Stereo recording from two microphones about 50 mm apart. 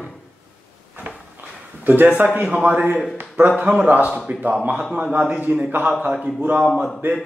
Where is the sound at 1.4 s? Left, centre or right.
Right.